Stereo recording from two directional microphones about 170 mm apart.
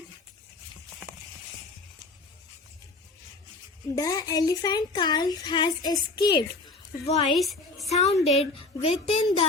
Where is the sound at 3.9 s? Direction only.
20° left (ahead or behind).